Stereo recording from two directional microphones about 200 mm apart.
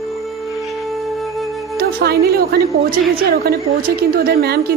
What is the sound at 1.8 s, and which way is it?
A woman's voice, 50° right (ahead or behind).